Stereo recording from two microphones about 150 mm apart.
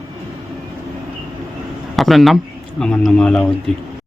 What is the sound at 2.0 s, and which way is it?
Speech, centre (ahead or behind).